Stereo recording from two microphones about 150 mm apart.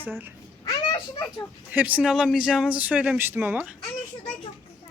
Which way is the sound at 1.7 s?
10° right (ahead or behind).